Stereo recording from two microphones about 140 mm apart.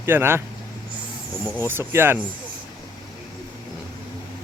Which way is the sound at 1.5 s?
15° right (ahead or behind).